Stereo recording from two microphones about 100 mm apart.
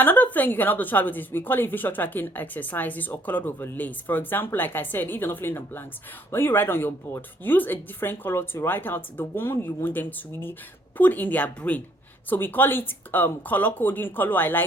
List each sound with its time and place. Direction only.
0.0 s a woman's voice: 15° left (ahead or behind)